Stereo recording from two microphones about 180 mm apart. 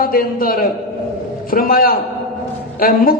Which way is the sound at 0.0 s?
55° left (ahead or behind).